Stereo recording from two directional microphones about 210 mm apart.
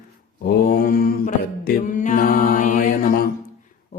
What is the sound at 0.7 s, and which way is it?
Mantra, 45° left (ahead or behind).